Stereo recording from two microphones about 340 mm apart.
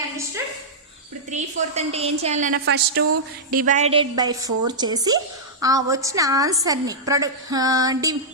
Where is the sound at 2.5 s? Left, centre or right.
Right.